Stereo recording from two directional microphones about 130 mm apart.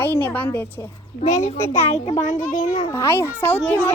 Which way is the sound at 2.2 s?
75° left (ahead or behind).